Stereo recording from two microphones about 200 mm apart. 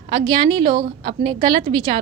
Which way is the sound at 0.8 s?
35° right (ahead or behind).